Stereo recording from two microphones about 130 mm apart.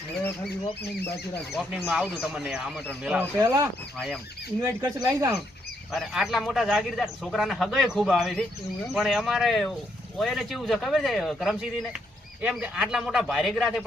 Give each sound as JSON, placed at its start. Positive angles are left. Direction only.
{"t": 1.5, "sound": "a man's voice", "side_deg": -5}
{"t": 3.3, "sound": "speech", "side_deg": -20}
{"t": 3.9, "sound": "a man's voice", "side_deg": 0}
{"t": 4.6, "sound": "speech", "side_deg": -30}
{"t": 5.9, "sound": "a man's voice", "side_deg": 0}